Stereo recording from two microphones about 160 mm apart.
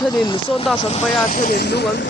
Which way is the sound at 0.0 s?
30° left (ahead or behind).